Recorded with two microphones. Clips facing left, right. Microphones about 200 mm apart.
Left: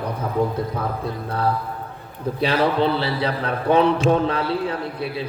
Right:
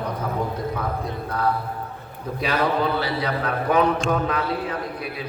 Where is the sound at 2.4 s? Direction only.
30° left (ahead or behind).